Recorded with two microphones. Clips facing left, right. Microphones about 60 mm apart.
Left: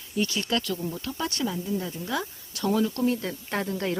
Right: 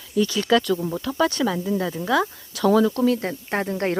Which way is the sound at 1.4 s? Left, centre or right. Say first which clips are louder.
Right 6 dB; right.